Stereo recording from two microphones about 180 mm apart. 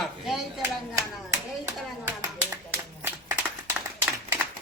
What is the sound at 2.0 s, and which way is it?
Clapping, 10° right (ahead or behind).